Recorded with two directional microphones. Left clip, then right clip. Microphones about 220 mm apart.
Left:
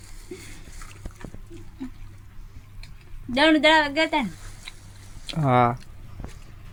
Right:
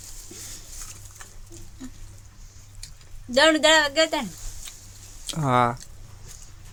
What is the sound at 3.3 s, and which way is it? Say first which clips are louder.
Speech: even; 30° right (ahead or behind).